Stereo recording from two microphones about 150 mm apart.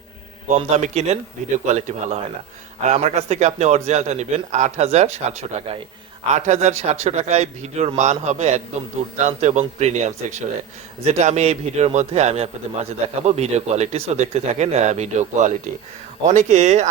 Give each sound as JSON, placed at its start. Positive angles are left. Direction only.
{"t": 0.5, "sound": "a man's voice", "side_deg": -50}